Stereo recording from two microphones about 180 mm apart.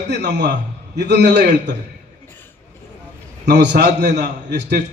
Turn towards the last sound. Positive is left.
turn(degrees=-70)  # may be behind; listen again after turning